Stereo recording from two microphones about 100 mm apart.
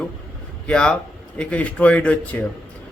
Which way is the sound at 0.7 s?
10° left (ahead or behind).